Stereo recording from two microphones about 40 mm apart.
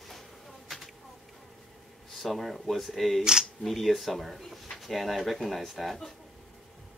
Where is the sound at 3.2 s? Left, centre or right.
Centre.